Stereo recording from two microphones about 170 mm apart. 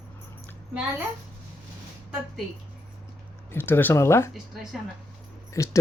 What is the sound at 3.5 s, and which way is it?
Speech, 15° left (ahead or behind).